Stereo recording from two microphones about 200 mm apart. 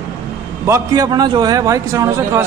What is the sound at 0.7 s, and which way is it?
A man's voice, 20° right (ahead or behind).